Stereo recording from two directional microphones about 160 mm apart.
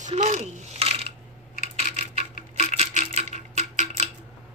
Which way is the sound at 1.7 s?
45° right (ahead or behind).